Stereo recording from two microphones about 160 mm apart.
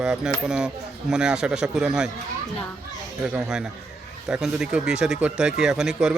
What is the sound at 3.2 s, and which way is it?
Speech, 5° right (ahead or behind).